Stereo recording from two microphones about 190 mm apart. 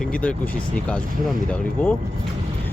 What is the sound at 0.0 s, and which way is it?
Speech, 5° left (ahead or behind).